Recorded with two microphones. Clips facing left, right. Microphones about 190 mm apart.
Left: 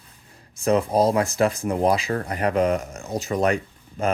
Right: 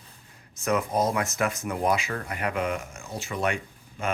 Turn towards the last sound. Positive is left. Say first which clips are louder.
# left 6 dB
turn(degrees=40)  # may be behind; listen again after turning